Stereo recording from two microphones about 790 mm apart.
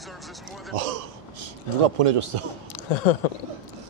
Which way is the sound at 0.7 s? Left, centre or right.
Right.